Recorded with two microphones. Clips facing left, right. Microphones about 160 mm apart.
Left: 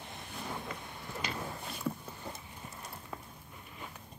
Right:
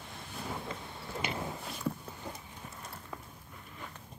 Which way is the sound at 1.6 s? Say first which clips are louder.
Right 1 dB; centre (ahead or behind).